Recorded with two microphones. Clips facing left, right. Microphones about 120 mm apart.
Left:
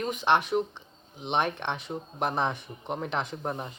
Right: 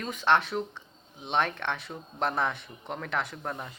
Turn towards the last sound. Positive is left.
turn(degrees=20)  # may be behind; listen again after turning